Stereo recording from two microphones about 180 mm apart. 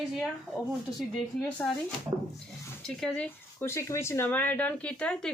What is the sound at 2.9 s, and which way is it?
Speech, 5° left (ahead or behind).